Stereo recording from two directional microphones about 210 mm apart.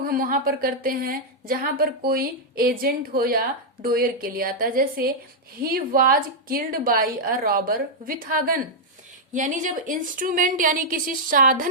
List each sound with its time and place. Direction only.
0.0 s a woman's voice: 45° right (ahead or behind)